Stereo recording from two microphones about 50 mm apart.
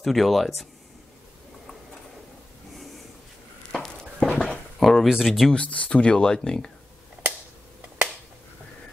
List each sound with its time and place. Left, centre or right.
0.0 s speech: centre
4.2 s dog: centre
5.1 s speech: centre
5.5 s speech: left